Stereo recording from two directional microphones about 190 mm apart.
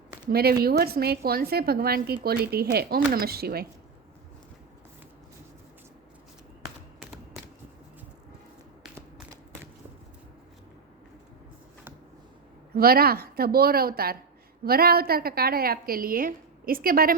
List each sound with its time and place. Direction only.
0.3 s a woman's voice: 55° right (ahead or behind)
7.0 s typewriter: 5° right (ahead or behind)
12.7 s a woman's voice: 50° right (ahead or behind)